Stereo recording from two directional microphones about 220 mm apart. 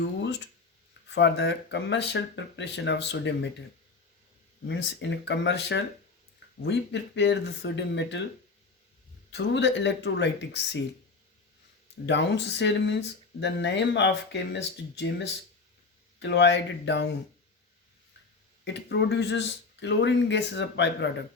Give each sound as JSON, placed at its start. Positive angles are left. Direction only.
{"t": 0.0, "sound": "a sound", "side_deg": 50}
{"t": 1.1, "sound": "speech", "side_deg": 50}
{"t": 4.6, "sound": "speech", "side_deg": 55}
{"t": 9.3, "sound": "speech", "side_deg": 50}
{"t": 12.0, "sound": "speech", "side_deg": 55}
{"t": 16.2, "sound": "speech", "side_deg": 50}
{"t": 18.6, "sound": "speech", "side_deg": 50}